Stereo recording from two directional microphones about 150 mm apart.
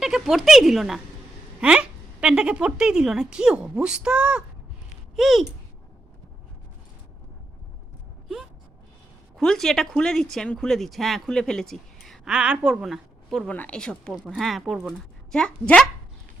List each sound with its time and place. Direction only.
0.0 s speech: centre (ahead or behind)
9.4 s speech: 5° left (ahead or behind)